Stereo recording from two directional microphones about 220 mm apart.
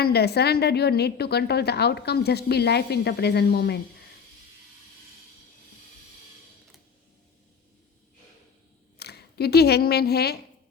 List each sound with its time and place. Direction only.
0.0 s a woman's voice: 45° left (ahead or behind)
9.0 s speech: 45° left (ahead or behind)